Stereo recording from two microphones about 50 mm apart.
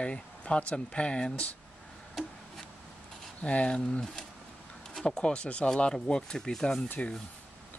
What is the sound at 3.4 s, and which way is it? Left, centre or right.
Speech, left.